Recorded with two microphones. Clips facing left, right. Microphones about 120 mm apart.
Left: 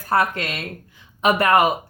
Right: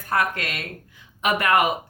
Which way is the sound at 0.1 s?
30° left (ahead or behind).